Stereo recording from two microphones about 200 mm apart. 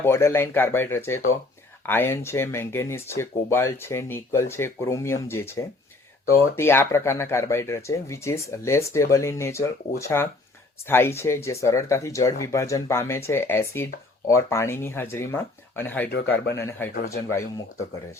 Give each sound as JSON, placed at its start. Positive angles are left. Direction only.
{"t": 0.0, "sound": "speech", "side_deg": 15}
{"t": 16.0, "sound": "speech", "side_deg": 55}
{"t": 16.6, "sound": "speech", "side_deg": 10}